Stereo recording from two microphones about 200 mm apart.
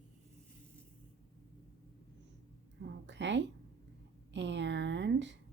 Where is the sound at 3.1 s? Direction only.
65° right (ahead or behind).